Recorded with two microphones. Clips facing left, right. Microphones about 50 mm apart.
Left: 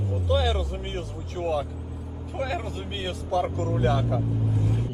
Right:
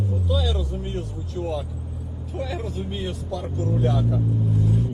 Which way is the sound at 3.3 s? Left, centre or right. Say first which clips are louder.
Left 7 dB; left.